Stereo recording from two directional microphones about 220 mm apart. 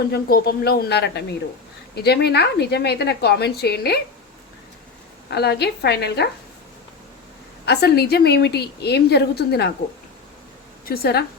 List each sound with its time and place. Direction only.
0.1 s a woman's voice: 45° left (ahead or behind)
5.3 s a woman's voice: 50° left (ahead or behind)
7.6 s a woman's voice: 50° left (ahead or behind)
10.8 s a woman's voice: 45° left (ahead or behind)